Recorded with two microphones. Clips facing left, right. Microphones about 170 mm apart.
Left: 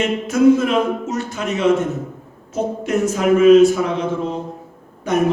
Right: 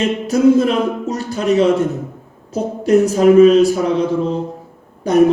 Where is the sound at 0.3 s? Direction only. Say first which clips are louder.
Right 1 dB; 35° right (ahead or behind).